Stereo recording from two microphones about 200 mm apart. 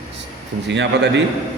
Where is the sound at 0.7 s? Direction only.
65° right (ahead or behind).